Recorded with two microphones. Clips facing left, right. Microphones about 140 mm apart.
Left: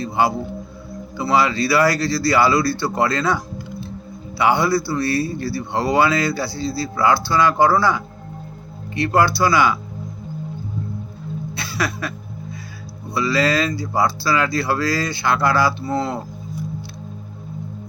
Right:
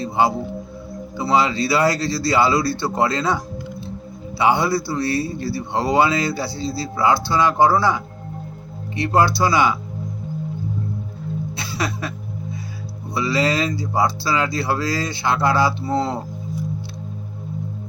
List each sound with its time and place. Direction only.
0.0 s a man's voice: 25° right (ahead or behind)
11.5 s music: 25° right (ahead or behind)
13.1 s a man's voice: 25° right (ahead or behind)